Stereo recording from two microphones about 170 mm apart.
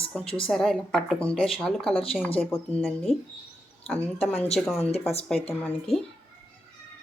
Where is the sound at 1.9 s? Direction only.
35° left (ahead or behind).